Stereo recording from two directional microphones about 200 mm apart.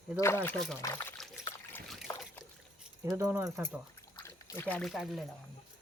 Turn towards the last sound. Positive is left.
turn(degrees=0)  # may be behind; listen again after turning